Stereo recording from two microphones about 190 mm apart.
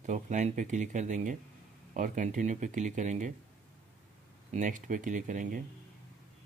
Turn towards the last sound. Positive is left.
turn(degrees=-40)  # may be behind; listen again after turning